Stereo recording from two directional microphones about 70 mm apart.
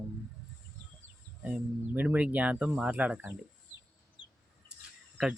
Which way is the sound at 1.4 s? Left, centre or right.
Right.